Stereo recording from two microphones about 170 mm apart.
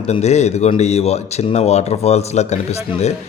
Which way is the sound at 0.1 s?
40° left (ahead or behind).